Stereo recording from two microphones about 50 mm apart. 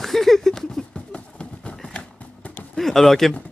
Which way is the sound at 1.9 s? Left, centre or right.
Left.